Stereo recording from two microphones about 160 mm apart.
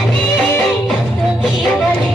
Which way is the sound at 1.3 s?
Centre (ahead or behind).